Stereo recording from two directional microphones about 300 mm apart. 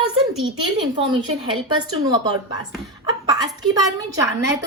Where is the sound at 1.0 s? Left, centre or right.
Centre.